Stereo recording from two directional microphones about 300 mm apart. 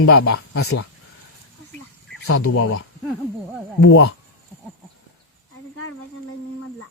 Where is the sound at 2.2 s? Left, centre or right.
Left.